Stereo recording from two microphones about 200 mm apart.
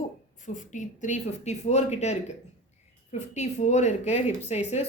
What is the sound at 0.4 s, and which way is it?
Speech, 40° left (ahead or behind).